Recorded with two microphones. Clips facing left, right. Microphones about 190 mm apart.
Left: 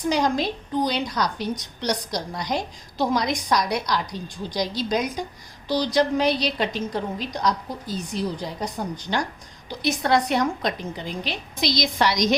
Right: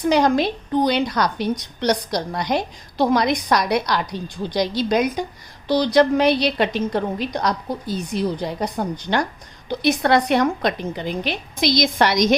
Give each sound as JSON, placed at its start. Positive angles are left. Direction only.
{"t": 0.1, "sound": "a woman's voice", "side_deg": -65}